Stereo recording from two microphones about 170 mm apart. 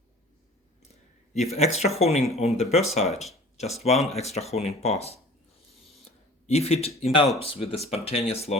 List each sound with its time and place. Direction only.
1.5 s speech: 40° left (ahead or behind)
5.9 s a sound: 40° left (ahead or behind)
7.3 s speech: 35° left (ahead or behind)